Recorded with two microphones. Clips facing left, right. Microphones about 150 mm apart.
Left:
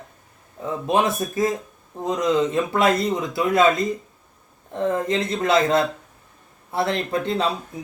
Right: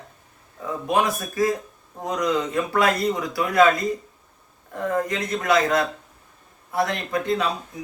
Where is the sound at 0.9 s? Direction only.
25° left (ahead or behind).